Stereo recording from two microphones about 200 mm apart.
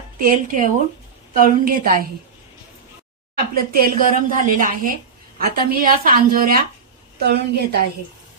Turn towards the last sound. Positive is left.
turn(degrees=-55)  # may be behind; listen again after turning